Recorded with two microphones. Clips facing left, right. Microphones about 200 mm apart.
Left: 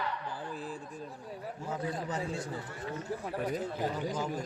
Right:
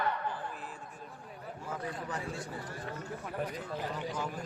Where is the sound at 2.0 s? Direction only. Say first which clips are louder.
Left 3 dB; 20° left (ahead or behind).